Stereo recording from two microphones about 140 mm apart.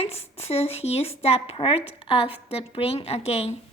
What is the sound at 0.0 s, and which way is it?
Speech, 45° left (ahead or behind).